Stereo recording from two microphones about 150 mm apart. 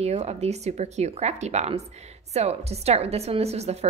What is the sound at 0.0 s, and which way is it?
A woman's voice, 45° right (ahead or behind).